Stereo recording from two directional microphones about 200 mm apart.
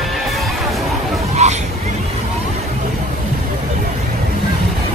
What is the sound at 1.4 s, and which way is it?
Hubbub, 35° right (ahead or behind).